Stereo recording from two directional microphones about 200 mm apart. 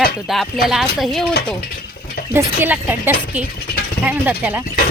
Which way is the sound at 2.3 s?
10° right (ahead or behind).